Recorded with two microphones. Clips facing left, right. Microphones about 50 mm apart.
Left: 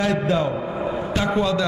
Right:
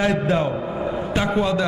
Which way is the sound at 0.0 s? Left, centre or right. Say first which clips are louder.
Right 1 dB; right.